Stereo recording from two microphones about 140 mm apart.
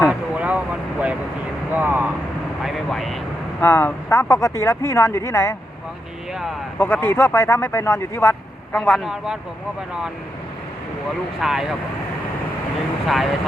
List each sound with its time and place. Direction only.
0.1 s vehicle: 10° right (ahead or behind)
2.6 s vehicle: centre (ahead or behind)
3.6 s speech: 15° left (ahead or behind)
6.7 s speech: 15° left (ahead or behind)
8.7 s a man's voice: centre (ahead or behind)
11.3 s a man's voice: centre (ahead or behind)
13.1 s a man's voice: centre (ahead or behind)